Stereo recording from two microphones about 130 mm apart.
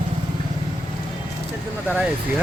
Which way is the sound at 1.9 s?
10° right (ahead or behind).